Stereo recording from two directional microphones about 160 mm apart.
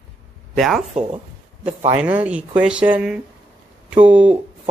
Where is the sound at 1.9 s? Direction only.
10° right (ahead or behind).